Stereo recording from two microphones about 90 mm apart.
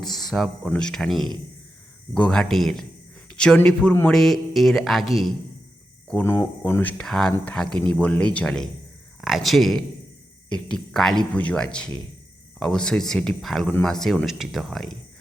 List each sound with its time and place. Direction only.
0.0 s speech: 5° left (ahead or behind)
6.2 s speech: 25° left (ahead or behind)
7.0 s speech: 5° left (ahead or behind)
9.2 s speech: centre (ahead or behind)